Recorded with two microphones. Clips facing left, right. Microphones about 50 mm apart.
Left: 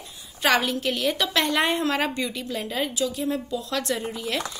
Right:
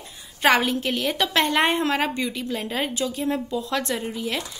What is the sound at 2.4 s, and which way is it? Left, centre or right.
Speech, right.